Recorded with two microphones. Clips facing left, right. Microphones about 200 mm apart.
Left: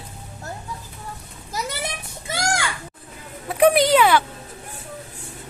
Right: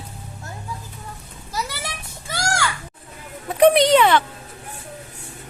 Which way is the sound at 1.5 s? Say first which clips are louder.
Left 1 dB; 20° left (ahead or behind).